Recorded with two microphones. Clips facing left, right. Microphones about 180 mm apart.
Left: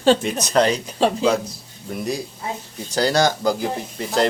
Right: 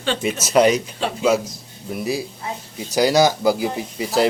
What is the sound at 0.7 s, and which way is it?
Speech, 40° left (ahead or behind).